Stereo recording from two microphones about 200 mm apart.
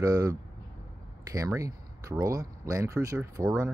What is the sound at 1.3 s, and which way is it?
Speech, 15° right (ahead or behind).